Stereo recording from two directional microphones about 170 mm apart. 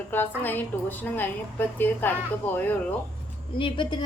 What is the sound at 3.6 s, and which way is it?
Speech, 30° left (ahead or behind).